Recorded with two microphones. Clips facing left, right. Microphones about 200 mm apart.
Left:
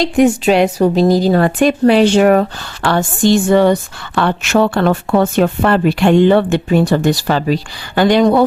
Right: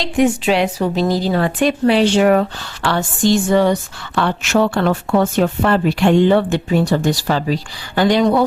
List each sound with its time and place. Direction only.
0.0 s a woman's voice: 45° left (ahead or behind)
3.2 s a woman's voice: 60° left (ahead or behind)